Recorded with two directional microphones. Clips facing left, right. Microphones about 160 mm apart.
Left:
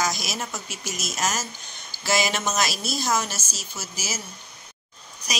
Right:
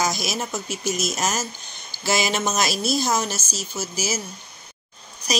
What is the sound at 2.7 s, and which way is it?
Speech, centre (ahead or behind).